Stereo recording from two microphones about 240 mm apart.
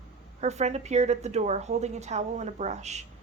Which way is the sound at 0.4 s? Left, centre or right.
Right.